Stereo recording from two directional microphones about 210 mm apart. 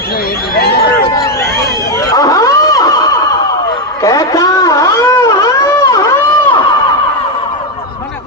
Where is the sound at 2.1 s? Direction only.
15° left (ahead or behind).